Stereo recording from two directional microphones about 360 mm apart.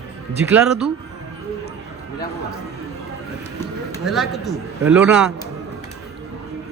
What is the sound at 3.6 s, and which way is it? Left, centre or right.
A man's voice, centre.